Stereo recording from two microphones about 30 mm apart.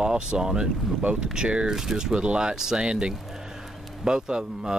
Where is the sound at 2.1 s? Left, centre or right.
Right.